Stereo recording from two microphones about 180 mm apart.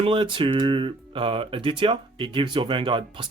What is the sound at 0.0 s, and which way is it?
Speech, 30° right (ahead or behind).